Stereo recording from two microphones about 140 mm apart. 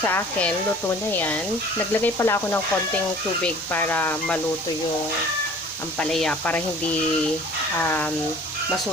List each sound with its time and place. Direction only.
0.0 s speech: 10° left (ahead or behind)
6.0 s speech: 5° left (ahead or behind)
7.8 s speech: 15° left (ahead or behind)